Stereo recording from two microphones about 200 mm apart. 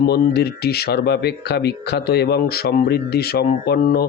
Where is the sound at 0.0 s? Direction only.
55° left (ahead or behind).